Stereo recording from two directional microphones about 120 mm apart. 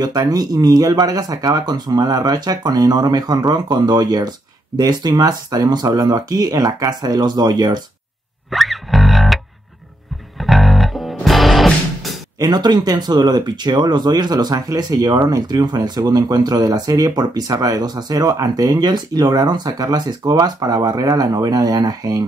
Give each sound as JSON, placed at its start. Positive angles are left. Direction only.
{"t": 0.0, "sound": "speech", "side_deg": -35}
{"t": 8.5, "sound": "music", "side_deg": 0}
{"t": 10.4, "sound": "music", "side_deg": 0}
{"t": 12.4, "sound": "speech", "side_deg": -35}